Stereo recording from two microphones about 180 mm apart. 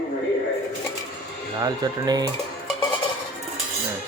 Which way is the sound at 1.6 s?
20° right (ahead or behind).